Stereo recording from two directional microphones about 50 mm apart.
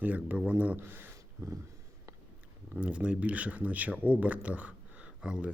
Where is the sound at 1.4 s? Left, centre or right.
Right.